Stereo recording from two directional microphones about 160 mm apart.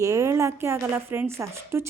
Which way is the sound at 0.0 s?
20° right (ahead or behind).